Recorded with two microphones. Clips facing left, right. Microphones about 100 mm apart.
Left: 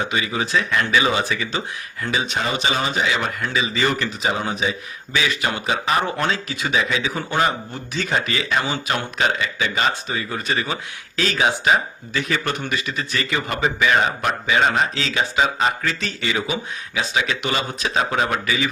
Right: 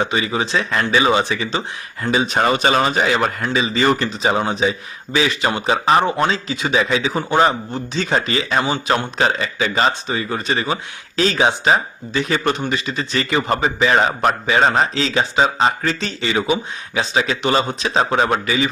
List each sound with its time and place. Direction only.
0.0 s a man's voice: 35° right (ahead or behind)
2.0 s speech: 15° right (ahead or behind)
2.4 s a man's voice: 50° right (ahead or behind); by 6.2 s 35° right (ahead or behind)
6.2 s a man's voice: 25° right (ahead or behind)